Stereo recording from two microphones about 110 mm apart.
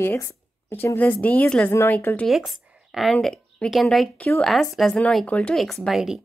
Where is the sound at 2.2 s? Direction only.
Centre (ahead or behind).